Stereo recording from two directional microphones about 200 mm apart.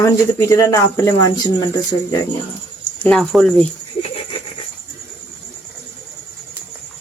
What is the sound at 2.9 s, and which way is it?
Speech, 5° left (ahead or behind).